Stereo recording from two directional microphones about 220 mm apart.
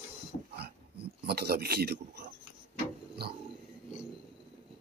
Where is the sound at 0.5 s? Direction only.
45° right (ahead or behind).